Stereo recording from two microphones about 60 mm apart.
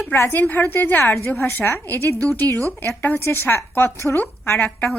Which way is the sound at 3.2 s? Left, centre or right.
Left.